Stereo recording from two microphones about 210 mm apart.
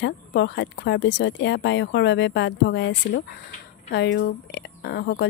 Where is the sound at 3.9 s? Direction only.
55° left (ahead or behind).